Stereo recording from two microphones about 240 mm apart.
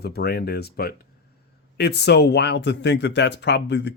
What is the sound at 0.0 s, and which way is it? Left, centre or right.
Speech, left.